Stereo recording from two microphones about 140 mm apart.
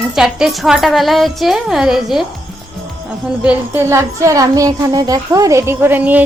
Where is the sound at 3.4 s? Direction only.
15° right (ahead or behind).